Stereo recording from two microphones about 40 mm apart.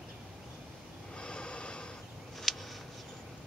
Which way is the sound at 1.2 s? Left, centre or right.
Left.